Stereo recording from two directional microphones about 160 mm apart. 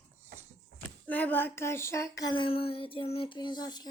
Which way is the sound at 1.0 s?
10° left (ahead or behind).